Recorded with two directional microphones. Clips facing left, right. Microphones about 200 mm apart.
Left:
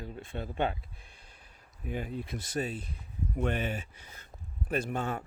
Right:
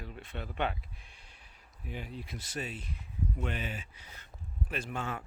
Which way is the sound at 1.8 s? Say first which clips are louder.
Left 6 dB; 50° left (ahead or behind).